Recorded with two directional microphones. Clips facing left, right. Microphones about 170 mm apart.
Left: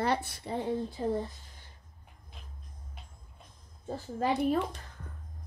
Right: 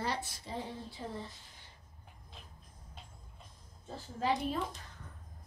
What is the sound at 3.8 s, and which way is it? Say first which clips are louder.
Speech: left 4 dB; 55° left (ahead or behind).